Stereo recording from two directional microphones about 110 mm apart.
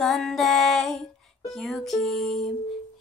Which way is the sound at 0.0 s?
Centre (ahead or behind).